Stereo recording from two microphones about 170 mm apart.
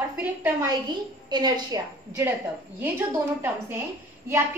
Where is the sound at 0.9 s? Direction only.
25° right (ahead or behind).